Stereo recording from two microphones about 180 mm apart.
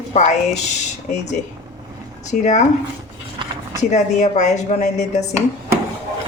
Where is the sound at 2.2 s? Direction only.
40° left (ahead or behind).